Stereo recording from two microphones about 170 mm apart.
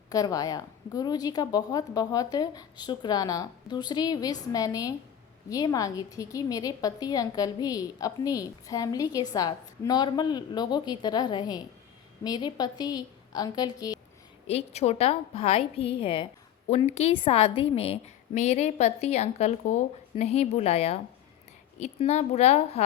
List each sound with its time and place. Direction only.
0.1 s a woman's voice: 20° left (ahead or behind)
14.4 s a woman's voice: 40° left (ahead or behind)